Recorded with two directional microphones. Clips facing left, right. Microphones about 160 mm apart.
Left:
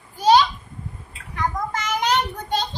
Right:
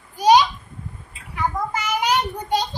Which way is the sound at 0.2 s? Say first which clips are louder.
Right 1 dB; 15° right (ahead or behind).